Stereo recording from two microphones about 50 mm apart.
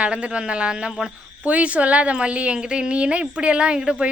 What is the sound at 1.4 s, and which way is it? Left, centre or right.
A woman's voice, right.